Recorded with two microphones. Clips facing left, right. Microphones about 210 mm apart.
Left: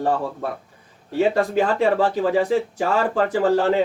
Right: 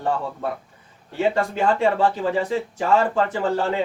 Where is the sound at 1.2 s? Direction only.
35° left (ahead or behind).